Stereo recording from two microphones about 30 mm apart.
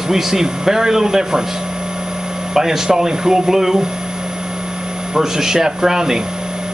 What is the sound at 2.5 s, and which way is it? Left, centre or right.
Speech, centre.